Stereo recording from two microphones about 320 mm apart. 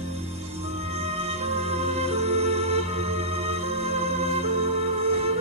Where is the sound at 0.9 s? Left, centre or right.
Centre.